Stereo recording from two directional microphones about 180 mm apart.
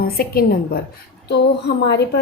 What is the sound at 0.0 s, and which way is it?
Speech, 60° left (ahead or behind).